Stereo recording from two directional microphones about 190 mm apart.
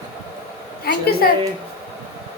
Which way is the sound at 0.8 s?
55° left (ahead or behind).